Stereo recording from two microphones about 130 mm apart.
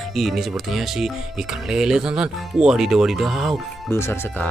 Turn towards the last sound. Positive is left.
turn(degrees=20)  # may be behind; listen again after turning